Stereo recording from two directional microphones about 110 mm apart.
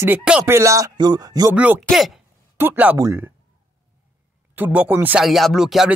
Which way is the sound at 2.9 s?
30° right (ahead or behind).